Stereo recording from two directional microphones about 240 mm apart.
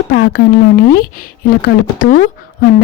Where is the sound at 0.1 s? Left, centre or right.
Left.